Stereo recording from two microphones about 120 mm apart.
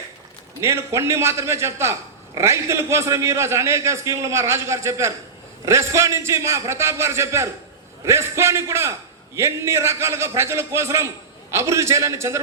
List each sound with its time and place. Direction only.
0.6 s a man's voice: 25° right (ahead or behind)